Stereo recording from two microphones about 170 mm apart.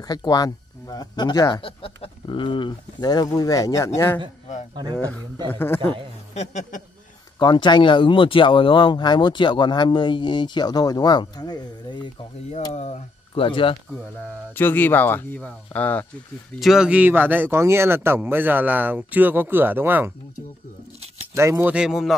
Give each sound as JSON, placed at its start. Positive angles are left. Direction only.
{"t": 0.1, "sound": "speech", "side_deg": 20}
{"t": 6.3, "sound": "speech", "side_deg": 45}
{"t": 7.3, "sound": "speech", "side_deg": 25}
{"t": 12.7, "sound": "speech", "side_deg": 40}
{"t": 14.5, "sound": "speech", "side_deg": 10}
{"t": 16.5, "sound": "speech", "side_deg": 0}
{"t": 21.4, "sound": "speech", "side_deg": -15}